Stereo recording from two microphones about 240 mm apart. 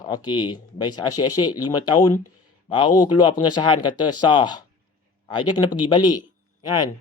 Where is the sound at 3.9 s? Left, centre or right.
Left.